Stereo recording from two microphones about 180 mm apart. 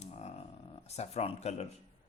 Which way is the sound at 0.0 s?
35° left (ahead or behind).